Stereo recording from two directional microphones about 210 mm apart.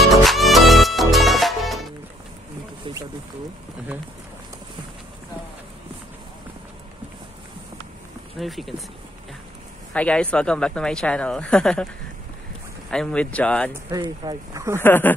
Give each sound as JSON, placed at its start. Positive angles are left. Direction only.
{"t": 0.0, "sound": "music", "side_deg": 0}
{"t": 8.4, "sound": "speech", "side_deg": 0}
{"t": 9.9, "sound": "speech", "side_deg": 5}
{"t": 12.9, "sound": "speech", "side_deg": 5}
{"t": 13.8, "sound": "speech", "side_deg": -20}
{"t": 14.8, "sound": "speech", "side_deg": 10}